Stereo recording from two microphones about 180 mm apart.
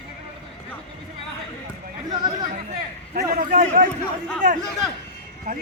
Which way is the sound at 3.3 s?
40° right (ahead or behind).